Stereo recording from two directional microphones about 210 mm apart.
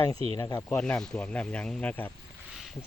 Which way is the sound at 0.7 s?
5° left (ahead or behind).